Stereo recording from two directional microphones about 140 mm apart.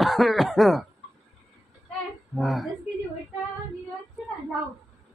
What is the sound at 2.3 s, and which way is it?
Mantra, centre (ahead or behind).